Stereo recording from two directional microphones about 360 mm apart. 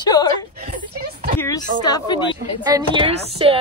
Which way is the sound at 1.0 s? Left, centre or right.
Right.